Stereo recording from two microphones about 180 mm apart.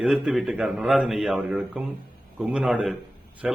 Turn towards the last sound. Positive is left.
turn(degrees=-5)  # may be behind; listen again after turning